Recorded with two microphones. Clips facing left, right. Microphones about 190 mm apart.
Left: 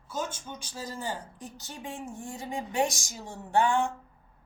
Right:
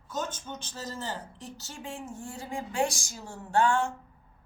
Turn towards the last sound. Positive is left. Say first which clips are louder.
# even
turn(degrees=15)  # may be behind; listen again after turning